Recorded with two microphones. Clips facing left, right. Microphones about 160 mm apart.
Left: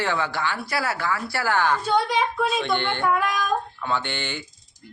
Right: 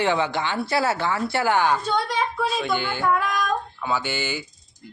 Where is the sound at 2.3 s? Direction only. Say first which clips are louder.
Left 1 dB; centre (ahead or behind).